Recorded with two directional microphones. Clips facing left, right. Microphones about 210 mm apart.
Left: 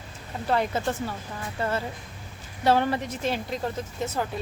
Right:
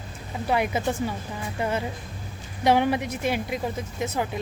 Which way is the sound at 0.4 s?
10° right (ahead or behind).